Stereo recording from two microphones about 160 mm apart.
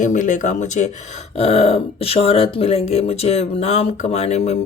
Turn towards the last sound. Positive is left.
turn(degrees=45)  # may be behind; listen again after turning